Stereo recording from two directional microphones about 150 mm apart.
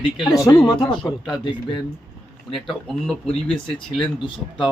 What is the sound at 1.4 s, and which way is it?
Speech, 30° left (ahead or behind).